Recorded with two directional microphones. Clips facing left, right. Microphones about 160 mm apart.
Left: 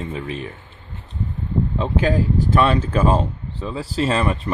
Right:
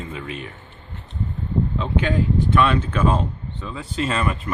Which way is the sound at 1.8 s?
35° left (ahead or behind).